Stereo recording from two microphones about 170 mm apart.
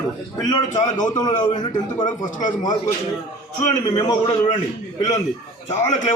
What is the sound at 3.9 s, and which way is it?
Speech, 25° left (ahead or behind).